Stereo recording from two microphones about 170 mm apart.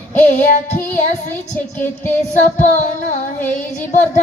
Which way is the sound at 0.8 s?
10° left (ahead or behind).